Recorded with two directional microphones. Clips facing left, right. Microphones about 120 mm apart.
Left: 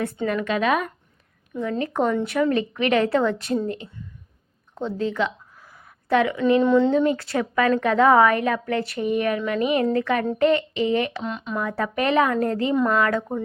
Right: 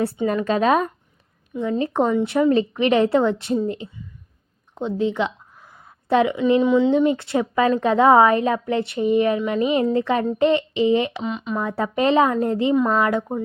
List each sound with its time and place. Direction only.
0.3 s a woman's voice: 35° right (ahead or behind)
4.7 s a sound: 20° right (ahead or behind)
6.6 s speech: 5° right (ahead or behind)
6.9 s a woman's voice: 20° right (ahead or behind)
11.2 s speech: centre (ahead or behind)
11.8 s a woman's voice: 25° right (ahead or behind)
12.7 s speech: 5° right (ahead or behind)
13.0 s speech: 15° right (ahead or behind)